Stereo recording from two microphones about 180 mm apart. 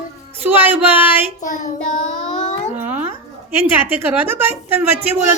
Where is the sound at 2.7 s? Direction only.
10° right (ahead or behind).